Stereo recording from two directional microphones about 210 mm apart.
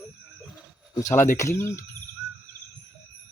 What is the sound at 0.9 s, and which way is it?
Speech, 15° left (ahead or behind).